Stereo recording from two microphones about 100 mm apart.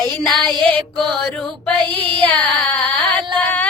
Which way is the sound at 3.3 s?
10° left (ahead or behind).